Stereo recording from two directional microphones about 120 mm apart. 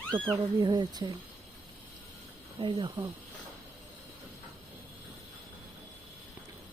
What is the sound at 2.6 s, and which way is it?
Speech, 40° right (ahead or behind).